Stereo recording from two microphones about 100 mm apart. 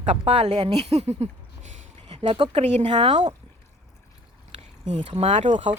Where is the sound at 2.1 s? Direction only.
75° right (ahead or behind); by 3.2 s 90° right.